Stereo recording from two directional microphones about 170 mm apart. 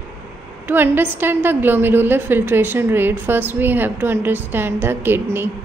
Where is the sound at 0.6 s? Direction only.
10° right (ahead or behind).